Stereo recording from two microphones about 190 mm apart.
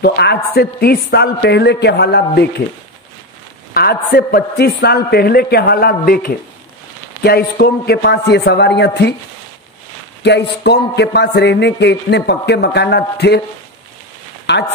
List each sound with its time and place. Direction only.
0.0 s a man's voice: 60° left (ahead or behind)
3.7 s a man's voice: 55° left (ahead or behind)
10.2 s a man's voice: 65° left (ahead or behind)
14.5 s a man's voice: 60° left (ahead or behind)